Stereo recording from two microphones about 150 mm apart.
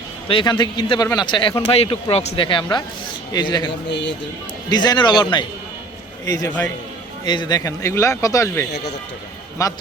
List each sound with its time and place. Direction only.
0.3 s a man's voice: 35° left (ahead or behind)